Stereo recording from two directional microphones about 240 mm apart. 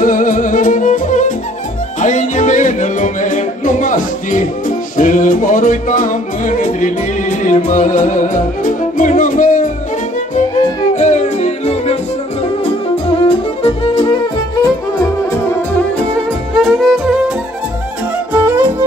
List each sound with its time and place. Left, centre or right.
0.0 s music: left
11.0 s yodeling: left
13.6 s music: left
16.5 s music: centre
18.3 s music: centre